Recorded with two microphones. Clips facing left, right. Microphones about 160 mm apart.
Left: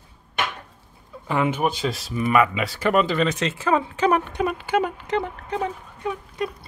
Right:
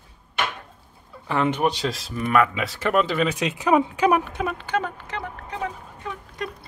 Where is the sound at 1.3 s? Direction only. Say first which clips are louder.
Even; 10° left (ahead or behind).